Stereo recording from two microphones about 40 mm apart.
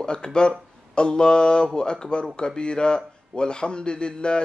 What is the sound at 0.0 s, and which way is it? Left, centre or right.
Speech, left.